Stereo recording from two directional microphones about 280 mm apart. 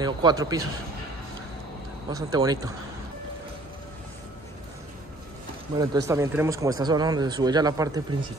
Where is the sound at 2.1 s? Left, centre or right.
Centre.